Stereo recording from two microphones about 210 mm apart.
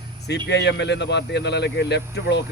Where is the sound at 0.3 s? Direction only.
55° left (ahead or behind).